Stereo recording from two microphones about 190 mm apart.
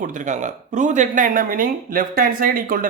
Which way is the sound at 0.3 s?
40° right (ahead or behind).